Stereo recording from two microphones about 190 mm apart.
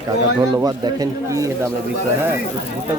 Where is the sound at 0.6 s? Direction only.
20° right (ahead or behind).